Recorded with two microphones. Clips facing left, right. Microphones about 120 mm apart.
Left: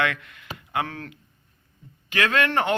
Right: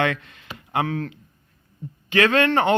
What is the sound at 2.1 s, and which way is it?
Speech, 30° right (ahead or behind).